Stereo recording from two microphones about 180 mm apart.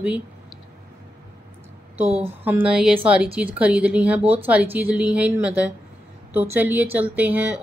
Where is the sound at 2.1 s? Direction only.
35° right (ahead or behind).